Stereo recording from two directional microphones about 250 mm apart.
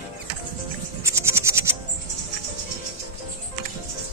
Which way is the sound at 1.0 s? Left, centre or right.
Centre.